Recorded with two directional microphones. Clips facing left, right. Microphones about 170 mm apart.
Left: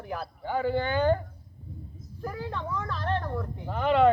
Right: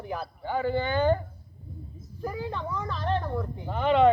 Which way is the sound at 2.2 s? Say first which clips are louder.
Right 2 dB; centre (ahead or behind).